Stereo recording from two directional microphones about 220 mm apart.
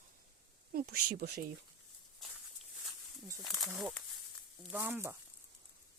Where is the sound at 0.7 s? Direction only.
45° right (ahead or behind).